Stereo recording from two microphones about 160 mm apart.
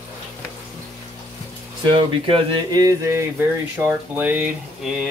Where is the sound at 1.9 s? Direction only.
35° right (ahead or behind); by 5.1 s 5° right (ahead or behind).